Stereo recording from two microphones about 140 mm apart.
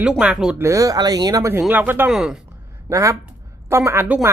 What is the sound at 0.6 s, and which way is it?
Speech, 20° right (ahead or behind).